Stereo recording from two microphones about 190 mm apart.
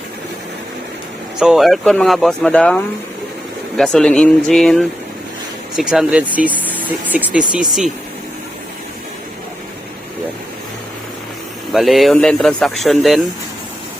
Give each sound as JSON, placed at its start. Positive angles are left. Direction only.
{"t": 1.4, "sound": "speech", "side_deg": 0}
{"t": 11.7, "sound": "speech", "side_deg": 0}